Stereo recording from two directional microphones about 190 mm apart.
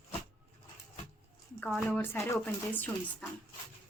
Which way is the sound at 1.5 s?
5° left (ahead or behind).